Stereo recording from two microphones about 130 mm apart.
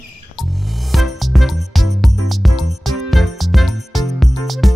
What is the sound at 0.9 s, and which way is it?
Music, centre (ahead or behind).